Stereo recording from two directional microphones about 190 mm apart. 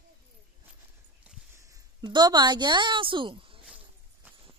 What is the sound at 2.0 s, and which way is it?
Speech, 20° right (ahead or behind).